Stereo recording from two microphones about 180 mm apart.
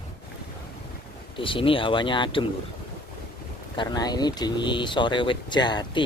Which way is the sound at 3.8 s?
20° left (ahead or behind).